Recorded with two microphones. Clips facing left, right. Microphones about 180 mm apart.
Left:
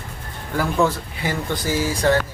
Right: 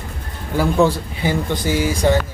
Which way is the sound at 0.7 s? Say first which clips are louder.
Right 3 dB; 20° right (ahead or behind).